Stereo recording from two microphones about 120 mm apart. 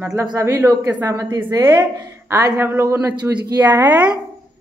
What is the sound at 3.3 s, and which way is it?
Speech, 10° right (ahead or behind).